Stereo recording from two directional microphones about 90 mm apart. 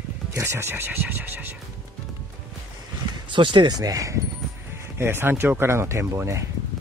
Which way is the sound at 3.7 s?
40° right (ahead or behind).